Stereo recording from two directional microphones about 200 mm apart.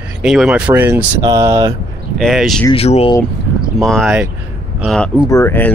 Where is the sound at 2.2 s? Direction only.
Centre (ahead or behind).